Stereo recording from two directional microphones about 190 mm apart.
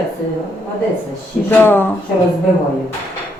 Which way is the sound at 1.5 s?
10° left (ahead or behind).